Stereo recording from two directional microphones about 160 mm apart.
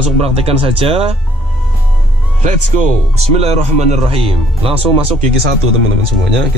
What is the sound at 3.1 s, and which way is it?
Speech, 40° right (ahead or behind).